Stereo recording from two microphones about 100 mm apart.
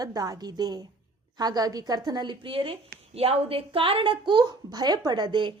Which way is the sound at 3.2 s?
75° right (ahead or behind).